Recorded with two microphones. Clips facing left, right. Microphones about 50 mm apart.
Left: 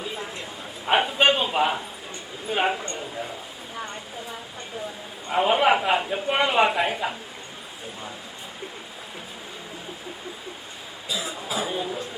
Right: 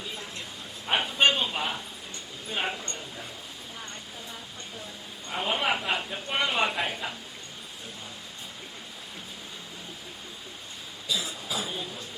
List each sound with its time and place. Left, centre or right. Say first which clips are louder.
0.9 s a sound: left 4 dB; centre
2.5 s speech: left 8 dB; centre
5.3 s speech: left 9 dB; centre
6.9 s speech: left 7 dB; left
11.1 s cough: left 2 dB; centre
11.5 s speech: left 6 dB; centre